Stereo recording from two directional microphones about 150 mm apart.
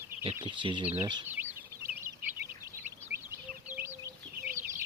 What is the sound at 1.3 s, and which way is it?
Bird, 15° right (ahead or behind).